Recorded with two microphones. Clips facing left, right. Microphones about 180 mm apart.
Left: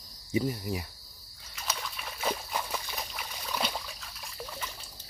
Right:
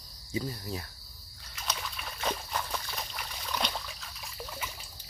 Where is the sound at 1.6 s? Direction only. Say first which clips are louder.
Even; centre (ahead or behind).